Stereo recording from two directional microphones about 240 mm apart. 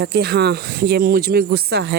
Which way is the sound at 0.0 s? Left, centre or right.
Right.